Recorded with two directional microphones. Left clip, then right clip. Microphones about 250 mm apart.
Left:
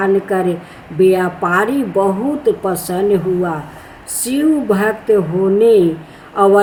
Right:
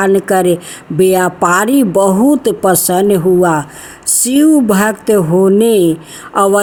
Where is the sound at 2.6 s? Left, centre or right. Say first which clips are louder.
Right 6 dB; right.